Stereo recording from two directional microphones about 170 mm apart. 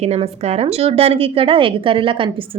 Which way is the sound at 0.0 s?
40° right (ahead or behind).